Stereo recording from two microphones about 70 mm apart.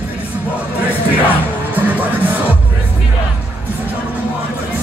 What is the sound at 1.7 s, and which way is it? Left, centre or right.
Music, right.